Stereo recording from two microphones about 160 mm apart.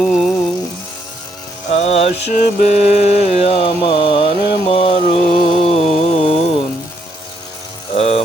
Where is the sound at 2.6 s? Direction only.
45° left (ahead or behind).